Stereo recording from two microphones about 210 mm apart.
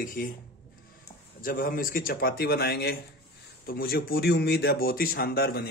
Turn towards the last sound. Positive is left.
turn(degrees=45)  # may be behind; listen again after turning